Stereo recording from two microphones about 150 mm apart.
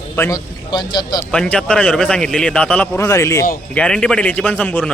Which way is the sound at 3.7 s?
5° left (ahead or behind).